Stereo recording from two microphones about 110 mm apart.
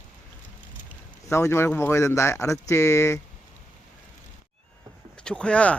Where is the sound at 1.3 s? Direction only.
25° left (ahead or behind).